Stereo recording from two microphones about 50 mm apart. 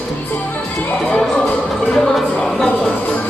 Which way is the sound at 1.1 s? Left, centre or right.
Left.